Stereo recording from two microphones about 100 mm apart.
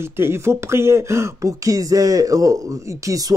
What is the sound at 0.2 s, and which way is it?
A man's voice, 25° right (ahead or behind).